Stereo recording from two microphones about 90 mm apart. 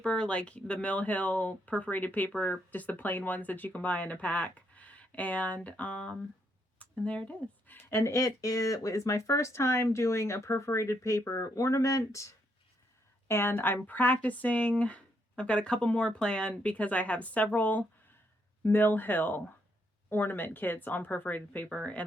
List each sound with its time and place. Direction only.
0.0 s speech: 10° left (ahead or behind)